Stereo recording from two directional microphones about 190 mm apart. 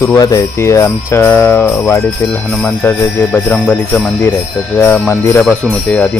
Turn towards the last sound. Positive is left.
turn(degrees=5)  # may be behind; listen again after turning